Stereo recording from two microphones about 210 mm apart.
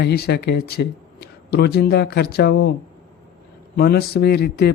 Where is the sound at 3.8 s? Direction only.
50° left (ahead or behind).